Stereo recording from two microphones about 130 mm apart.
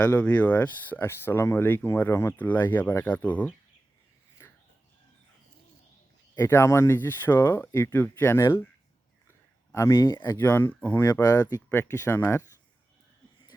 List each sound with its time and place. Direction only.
0.0 s speech: 10° left (ahead or behind)
6.3 s speech: 20° left (ahead or behind)
9.7 s speech: 25° left (ahead or behind)
10.4 s speech: 15° left (ahead or behind)
11.0 s speech: 30° left (ahead or behind)